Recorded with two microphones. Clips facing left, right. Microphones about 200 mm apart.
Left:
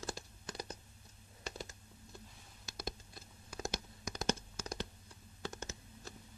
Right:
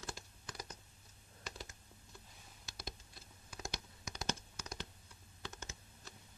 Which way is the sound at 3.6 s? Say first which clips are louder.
Left 6 dB; 45° left (ahead or behind).